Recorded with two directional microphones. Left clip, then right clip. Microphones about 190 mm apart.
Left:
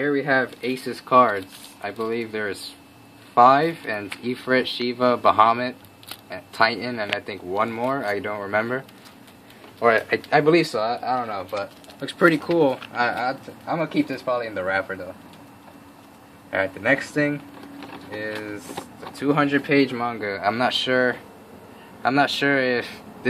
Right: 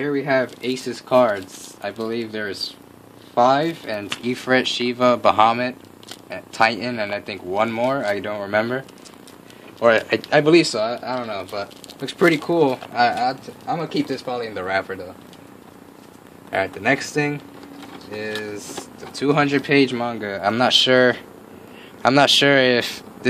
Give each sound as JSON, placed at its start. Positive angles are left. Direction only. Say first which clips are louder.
{"t": 0.0, "sound": "speech", "louder": "right 1 dB", "side_deg": -40}
{"t": 4.2, "sound": "speech", "louder": "right 3 dB", "side_deg": -40}
{"t": 12.0, "sound": "speech", "louder": "right 1 dB", "side_deg": -60}
{"t": 16.5, "sound": "speech", "louder": "right 1 dB", "side_deg": -55}
{"t": 19.1, "sound": "speech", "louder": "right 2 dB", "side_deg": -55}